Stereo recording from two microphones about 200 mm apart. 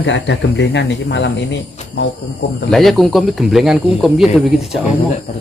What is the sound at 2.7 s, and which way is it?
Speech, centre (ahead or behind).